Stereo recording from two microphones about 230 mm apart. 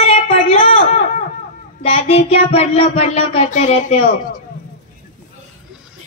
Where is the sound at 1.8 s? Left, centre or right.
Left.